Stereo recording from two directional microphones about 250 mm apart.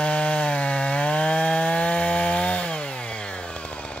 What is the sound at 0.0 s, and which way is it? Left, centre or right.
Wood, centre.